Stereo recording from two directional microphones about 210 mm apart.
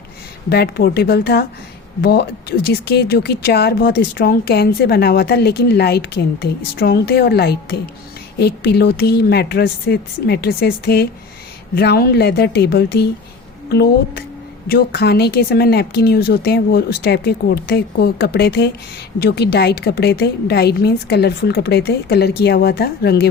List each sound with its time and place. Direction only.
0.5 s speech: 50° left (ahead or behind)